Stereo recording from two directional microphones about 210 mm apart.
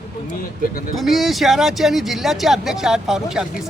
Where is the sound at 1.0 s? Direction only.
Centre (ahead or behind).